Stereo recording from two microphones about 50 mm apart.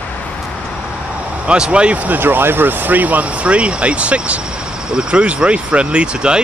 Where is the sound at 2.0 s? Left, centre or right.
Right.